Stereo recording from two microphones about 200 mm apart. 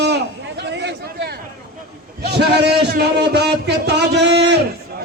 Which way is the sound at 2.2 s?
55° right (ahead or behind).